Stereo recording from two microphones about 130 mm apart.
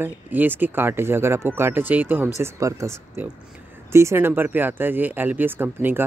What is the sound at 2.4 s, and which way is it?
Speech, 25° right (ahead or behind).